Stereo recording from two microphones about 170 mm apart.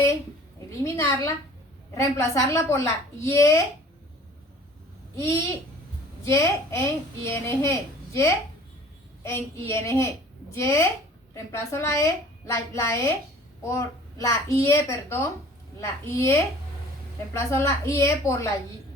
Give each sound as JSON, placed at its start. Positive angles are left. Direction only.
{"t": 0.8, "sound": "a woman's voice", "side_deg": 20}
{"t": 5.1, "sound": "a child's voice", "side_deg": 20}